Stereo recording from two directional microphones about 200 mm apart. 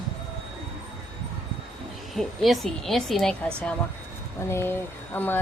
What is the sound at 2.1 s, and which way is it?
Speech, centre (ahead or behind).